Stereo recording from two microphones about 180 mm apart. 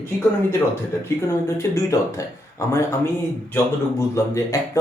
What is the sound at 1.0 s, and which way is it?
A man's voice, 15° left (ahead or behind).